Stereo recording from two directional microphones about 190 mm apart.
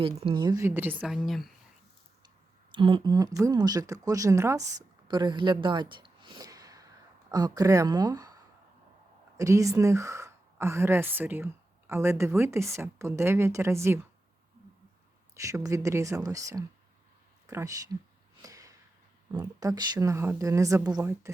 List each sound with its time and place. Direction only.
0.0 s speech: 30° right (ahead or behind); by 1.5 s centre (ahead or behind)
2.7 s a woman's voice: 25° right (ahead or behind)
9.4 s a woman's voice: 15° right (ahead or behind)
15.4 s speech: 15° right (ahead or behind)
18.4 s a sound: 20° right (ahead or behind)
19.3 s speech: 20° right (ahead or behind)